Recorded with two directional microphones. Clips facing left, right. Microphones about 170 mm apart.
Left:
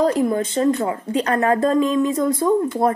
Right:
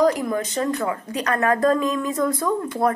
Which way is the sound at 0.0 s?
30° left (ahead or behind).